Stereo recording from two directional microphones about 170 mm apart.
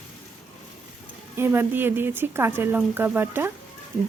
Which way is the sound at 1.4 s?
10° right (ahead or behind).